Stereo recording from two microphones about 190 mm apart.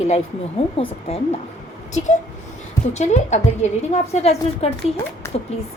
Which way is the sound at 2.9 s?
35° left (ahead or behind).